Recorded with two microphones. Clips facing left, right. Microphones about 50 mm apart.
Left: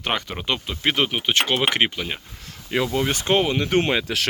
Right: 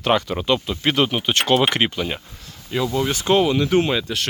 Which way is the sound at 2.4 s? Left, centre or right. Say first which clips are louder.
Even; left.